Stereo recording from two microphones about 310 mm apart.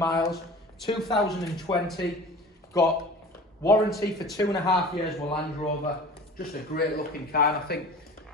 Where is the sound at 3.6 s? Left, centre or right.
Centre.